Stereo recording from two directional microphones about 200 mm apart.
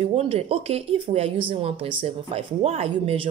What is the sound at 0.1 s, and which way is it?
Speech, 30° right (ahead or behind).